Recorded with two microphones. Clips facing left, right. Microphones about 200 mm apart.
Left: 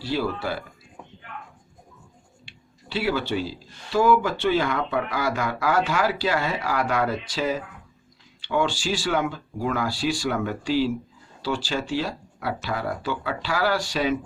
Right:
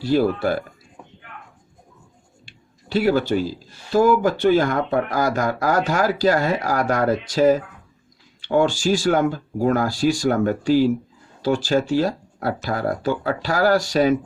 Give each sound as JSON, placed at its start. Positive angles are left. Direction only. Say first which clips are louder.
{"t": 0.0, "sound": "speech", "louder": "right 8 dB", "side_deg": -50}
{"t": 2.5, "sound": "a sound", "louder": "right 8 dB", "side_deg": -45}
{"t": 3.9, "sound": "speech", "louder": "right 4 dB", "side_deg": -45}